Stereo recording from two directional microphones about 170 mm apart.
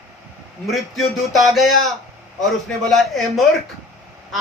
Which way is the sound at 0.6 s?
Centre (ahead or behind).